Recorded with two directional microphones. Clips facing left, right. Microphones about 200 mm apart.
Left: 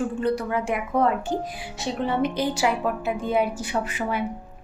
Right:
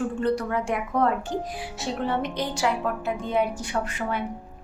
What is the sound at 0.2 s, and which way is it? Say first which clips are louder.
A woman's voice: even; 5° left (ahead or behind).